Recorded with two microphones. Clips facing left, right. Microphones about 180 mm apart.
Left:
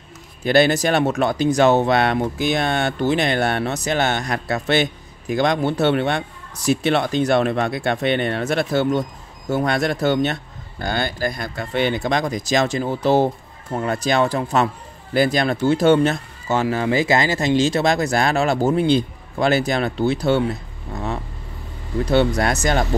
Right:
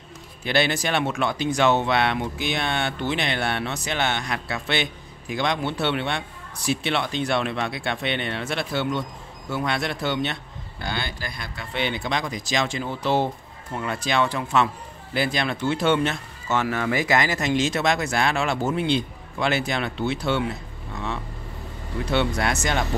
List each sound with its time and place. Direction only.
0.4 s speech: 45° left (ahead or behind)
20.9 s vehicle: 40° left (ahead or behind)
22.0 s speech: 40° left (ahead or behind)